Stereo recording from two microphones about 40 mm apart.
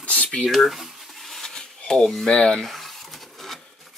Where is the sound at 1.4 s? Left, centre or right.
Centre.